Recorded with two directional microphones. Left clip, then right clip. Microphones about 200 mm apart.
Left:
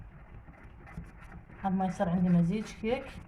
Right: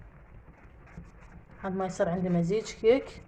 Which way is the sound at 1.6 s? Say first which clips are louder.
Right 2 dB; 45° right (ahead or behind).